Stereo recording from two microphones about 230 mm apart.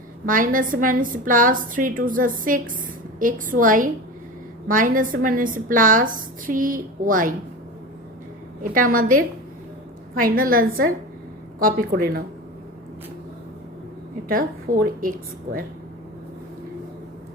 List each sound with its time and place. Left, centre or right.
0.3 s a woman's voice: right
8.7 s a woman's voice: right
14.3 s a woman's voice: right